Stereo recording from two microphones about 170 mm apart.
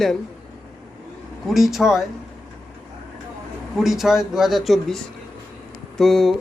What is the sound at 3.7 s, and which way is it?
A man's voice, centre (ahead or behind).